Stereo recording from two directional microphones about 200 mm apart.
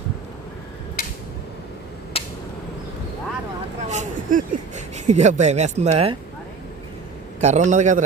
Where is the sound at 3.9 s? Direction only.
35° right (ahead or behind).